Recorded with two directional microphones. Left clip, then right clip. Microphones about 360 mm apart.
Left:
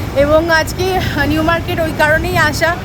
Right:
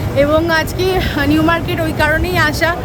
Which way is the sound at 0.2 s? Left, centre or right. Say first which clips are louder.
Left 2 dB; centre.